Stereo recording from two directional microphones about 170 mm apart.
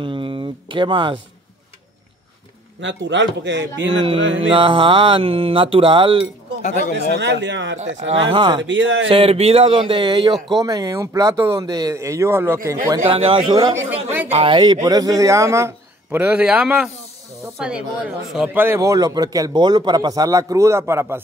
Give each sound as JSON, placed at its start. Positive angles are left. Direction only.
{"t": 0.0, "sound": "a sound", "side_deg": -30}
{"t": 2.8, "sound": "speech", "side_deg": -90}
{"t": 4.5, "sound": "speech", "side_deg": -30}
{"t": 7.2, "sound": "speech", "side_deg": -90}
{"t": 8.3, "sound": "speech", "side_deg": -30}
{"t": 8.6, "sound": "speech", "side_deg": -90}
{"t": 9.1, "sound": "speech", "side_deg": -35}
{"t": 13.1, "sound": "a man's voice", "side_deg": -35}